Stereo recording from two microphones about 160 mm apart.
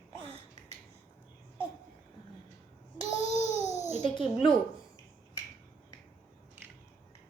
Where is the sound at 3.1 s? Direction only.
45° left (ahead or behind).